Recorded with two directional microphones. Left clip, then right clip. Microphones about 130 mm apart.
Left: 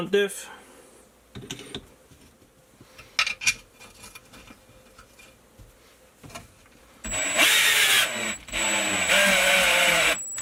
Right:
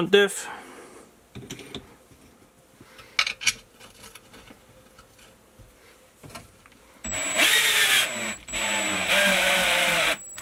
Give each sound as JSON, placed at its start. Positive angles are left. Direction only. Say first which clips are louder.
{"t": 0.1, "sound": "speech", "louder": "right 4 dB", "side_deg": -45}
{"t": 3.2, "sound": "a sound", "louder": "even", "side_deg": -10}
{"t": 7.0, "sound": "vehicle", "louder": "left 1 dB", "side_deg": 0}